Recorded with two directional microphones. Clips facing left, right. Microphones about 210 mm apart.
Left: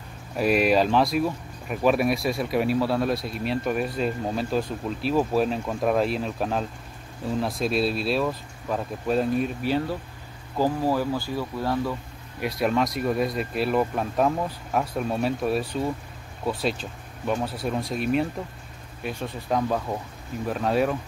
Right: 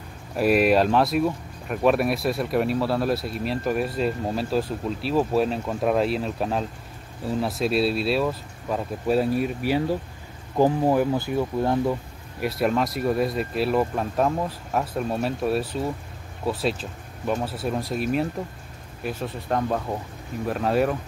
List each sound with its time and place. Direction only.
0.4 s speech: centre (ahead or behind)
10.6 s speech: 20° right (ahead or behind)
12.4 s speech: centre (ahead or behind)
17.3 s speech: 5° right (ahead or behind)